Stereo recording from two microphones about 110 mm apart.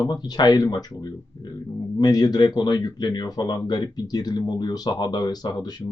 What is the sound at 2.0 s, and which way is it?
Speech, 35° left (ahead or behind).